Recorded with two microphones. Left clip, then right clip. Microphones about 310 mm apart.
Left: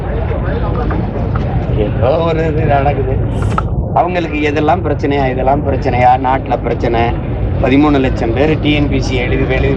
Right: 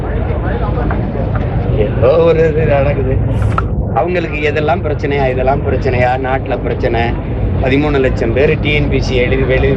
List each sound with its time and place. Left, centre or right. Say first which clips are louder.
2.0 s speech: right 5 dB; centre
4.1 s speech: even; centre